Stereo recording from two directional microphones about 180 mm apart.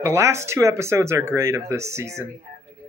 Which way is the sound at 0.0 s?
15° right (ahead or behind).